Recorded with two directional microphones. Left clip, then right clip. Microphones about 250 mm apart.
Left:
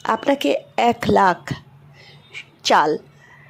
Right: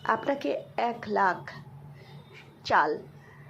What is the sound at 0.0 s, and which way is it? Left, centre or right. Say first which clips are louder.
Speech: left 8 dB; left.